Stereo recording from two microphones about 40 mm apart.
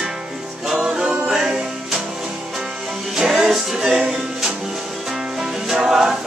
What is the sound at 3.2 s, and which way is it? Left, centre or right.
Music, centre.